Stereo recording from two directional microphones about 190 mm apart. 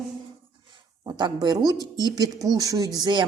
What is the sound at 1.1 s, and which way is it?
Speech, 20° right (ahead or behind).